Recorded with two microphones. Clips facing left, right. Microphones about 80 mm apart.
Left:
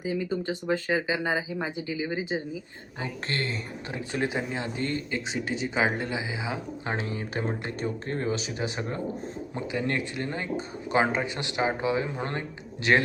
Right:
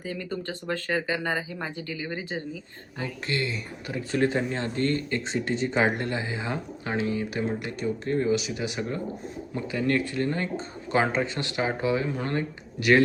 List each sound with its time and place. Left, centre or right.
0.0 s speech: centre
3.2 s speech: left
3.9 s speech: centre
6.8 s speech: left